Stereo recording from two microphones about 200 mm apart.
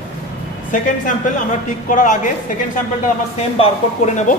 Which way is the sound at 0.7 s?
40° left (ahead or behind).